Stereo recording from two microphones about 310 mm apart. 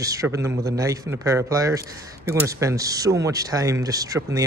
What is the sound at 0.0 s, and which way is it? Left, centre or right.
Speech, centre.